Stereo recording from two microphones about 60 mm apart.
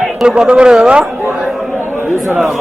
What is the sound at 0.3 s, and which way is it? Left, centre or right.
A man's voice, centre.